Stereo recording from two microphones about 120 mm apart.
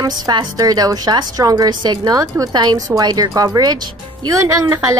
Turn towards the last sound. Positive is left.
turn(degrees=-25)  # may be behind; listen again after turning